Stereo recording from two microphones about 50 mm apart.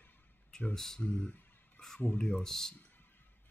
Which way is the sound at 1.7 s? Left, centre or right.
Centre.